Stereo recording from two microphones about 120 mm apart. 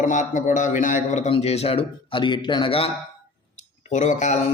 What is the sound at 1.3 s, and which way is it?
Speech, 60° left (ahead or behind).